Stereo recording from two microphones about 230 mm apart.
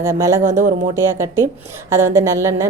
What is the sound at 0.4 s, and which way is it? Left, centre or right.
Speech, right.